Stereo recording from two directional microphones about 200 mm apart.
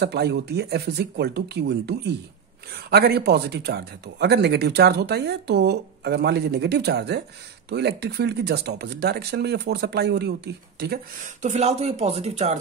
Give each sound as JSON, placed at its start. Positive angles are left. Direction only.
{"t": 0.0, "sound": "speech", "side_deg": -55}
{"t": 11.4, "sound": "speech", "side_deg": -35}